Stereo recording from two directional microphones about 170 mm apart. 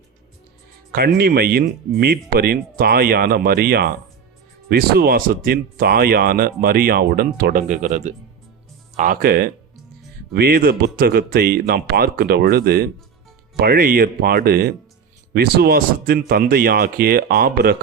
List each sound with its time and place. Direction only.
0.9 s speech: 65° right (ahead or behind)
7.7 s speech: 45° right (ahead or behind); by 17.7 s 65° right (ahead or behind)